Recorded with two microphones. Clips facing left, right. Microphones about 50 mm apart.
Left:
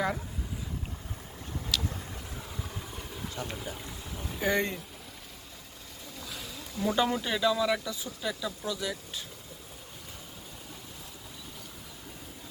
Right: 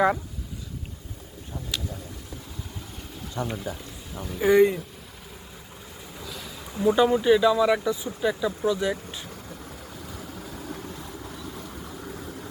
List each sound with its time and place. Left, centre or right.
1.7 s a sound: right
4.4 s speech: centre
6.7 s speech: centre